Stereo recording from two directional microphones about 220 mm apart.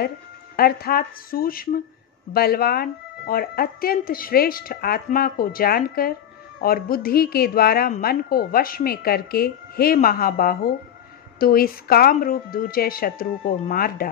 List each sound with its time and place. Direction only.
0.6 s a woman's voice: 45° left (ahead or behind)